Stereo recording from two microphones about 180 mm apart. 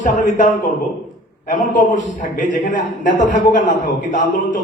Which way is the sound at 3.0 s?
45° left (ahead or behind).